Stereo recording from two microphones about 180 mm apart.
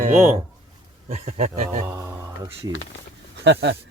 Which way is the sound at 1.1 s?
35° right (ahead or behind).